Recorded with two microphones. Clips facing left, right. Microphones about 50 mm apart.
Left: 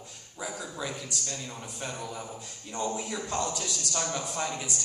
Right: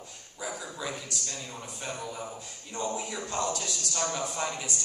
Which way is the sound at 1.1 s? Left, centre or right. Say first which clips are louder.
Left 1 dB; centre.